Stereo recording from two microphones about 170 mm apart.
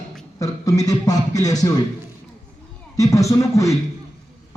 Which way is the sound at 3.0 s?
20° left (ahead or behind).